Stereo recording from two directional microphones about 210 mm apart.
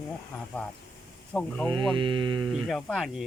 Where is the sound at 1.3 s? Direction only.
5° left (ahead or behind).